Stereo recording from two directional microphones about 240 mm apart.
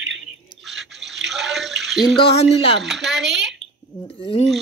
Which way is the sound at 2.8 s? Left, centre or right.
Centre.